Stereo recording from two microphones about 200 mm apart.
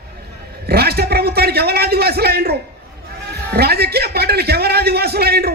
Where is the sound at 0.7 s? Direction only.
50° right (ahead or behind).